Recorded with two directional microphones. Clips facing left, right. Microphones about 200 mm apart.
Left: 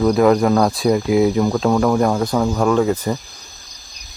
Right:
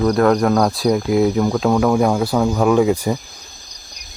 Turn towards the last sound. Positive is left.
turn(degrees=-10)  # may be behind; listen again after turning